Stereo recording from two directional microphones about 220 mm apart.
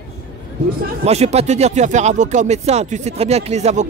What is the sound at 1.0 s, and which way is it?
Speech, 30° right (ahead or behind).